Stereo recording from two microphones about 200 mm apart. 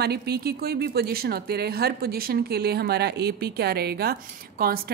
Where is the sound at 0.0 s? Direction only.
50° right (ahead or behind).